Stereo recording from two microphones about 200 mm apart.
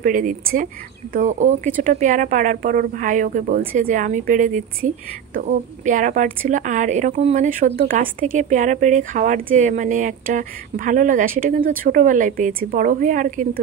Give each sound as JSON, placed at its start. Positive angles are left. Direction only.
{"t": 0.0, "sound": "a woman's voice", "side_deg": -40}